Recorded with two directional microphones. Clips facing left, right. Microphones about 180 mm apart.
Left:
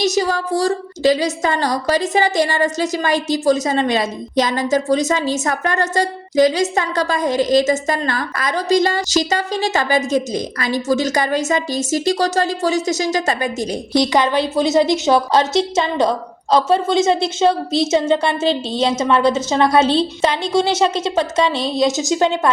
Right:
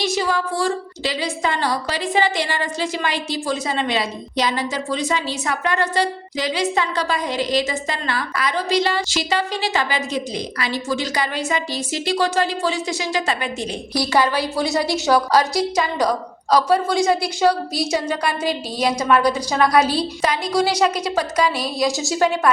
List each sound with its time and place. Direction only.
0.0 s a woman's voice: 40° left (ahead or behind)
13.9 s a woman's voice: 20° left (ahead or behind)